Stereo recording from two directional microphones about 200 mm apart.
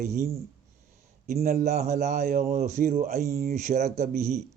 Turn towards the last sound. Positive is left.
turn(degrees=-35)  # may be behind; listen again after turning